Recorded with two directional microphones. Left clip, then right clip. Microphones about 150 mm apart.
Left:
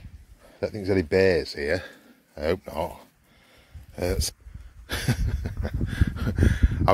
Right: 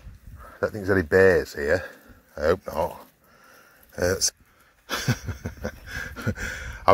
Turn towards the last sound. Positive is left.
turn(degrees=0)  # may be behind; listen again after turning